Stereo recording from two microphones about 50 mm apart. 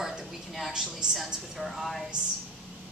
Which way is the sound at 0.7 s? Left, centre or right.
Centre.